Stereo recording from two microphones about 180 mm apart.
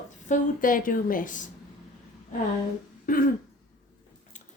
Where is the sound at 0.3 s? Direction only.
50° left (ahead or behind).